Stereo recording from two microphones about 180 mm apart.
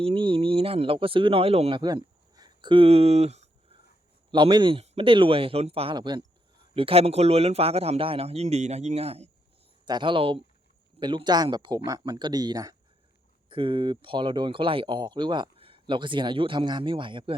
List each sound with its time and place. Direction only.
0.0 s speech: 30° right (ahead or behind)
1.8 s a sound: 20° right (ahead or behind)
4.3 s a man's voice: 25° right (ahead or behind)